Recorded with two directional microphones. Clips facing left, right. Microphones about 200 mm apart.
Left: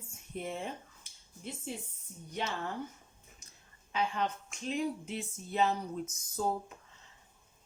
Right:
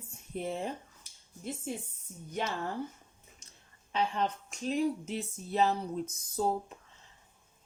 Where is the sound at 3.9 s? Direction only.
35° right (ahead or behind).